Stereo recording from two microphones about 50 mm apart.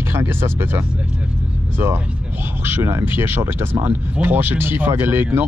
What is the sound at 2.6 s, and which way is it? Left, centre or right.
Speech, right.